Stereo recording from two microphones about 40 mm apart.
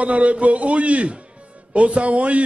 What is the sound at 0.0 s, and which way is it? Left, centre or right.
A man's voice, right.